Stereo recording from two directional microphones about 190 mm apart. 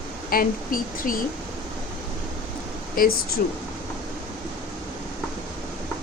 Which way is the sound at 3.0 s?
50° left (ahead or behind).